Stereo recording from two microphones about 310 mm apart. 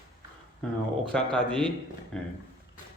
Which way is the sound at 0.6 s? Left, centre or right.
Centre.